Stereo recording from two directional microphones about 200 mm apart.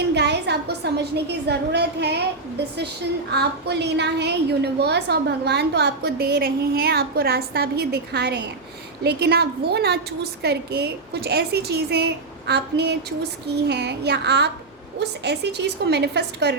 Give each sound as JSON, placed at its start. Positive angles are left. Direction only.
{"t": 0.1, "sound": "a woman's voice", "side_deg": -55}
{"t": 3.3, "sound": "a woman's voice", "side_deg": -55}